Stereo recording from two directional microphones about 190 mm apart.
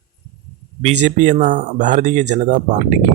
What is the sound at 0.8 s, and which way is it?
Speech, 35° right (ahead or behind).